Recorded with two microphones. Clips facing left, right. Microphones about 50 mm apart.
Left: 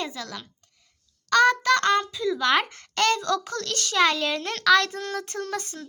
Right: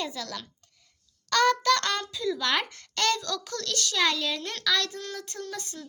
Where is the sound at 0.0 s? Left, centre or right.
Left.